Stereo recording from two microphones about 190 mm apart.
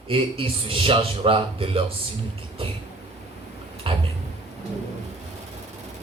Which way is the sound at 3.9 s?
25° right (ahead or behind).